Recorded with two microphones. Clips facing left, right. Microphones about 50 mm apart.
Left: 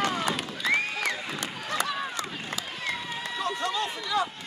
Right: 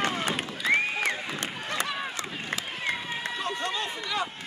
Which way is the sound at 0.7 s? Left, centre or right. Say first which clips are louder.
Right 2 dB; centre.